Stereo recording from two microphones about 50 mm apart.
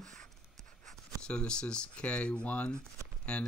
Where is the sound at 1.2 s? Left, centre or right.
Centre.